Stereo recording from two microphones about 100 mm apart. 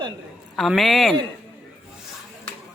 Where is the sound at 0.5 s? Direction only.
Centre (ahead or behind).